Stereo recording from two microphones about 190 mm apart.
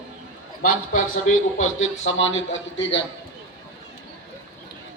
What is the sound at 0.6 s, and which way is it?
Speech, 45° left (ahead or behind).